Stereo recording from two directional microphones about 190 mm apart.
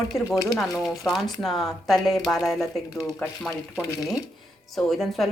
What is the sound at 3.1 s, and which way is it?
Speech, 15° left (ahead or behind).